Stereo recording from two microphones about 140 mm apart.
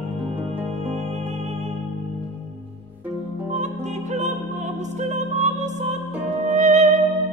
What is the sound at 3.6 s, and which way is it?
Music, 55° right (ahead or behind).